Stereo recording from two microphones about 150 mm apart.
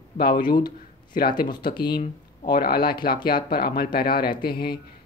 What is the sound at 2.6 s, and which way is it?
Speech, 90° left.